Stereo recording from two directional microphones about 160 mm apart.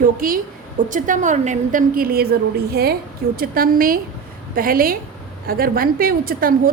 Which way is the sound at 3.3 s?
65° right (ahead or behind).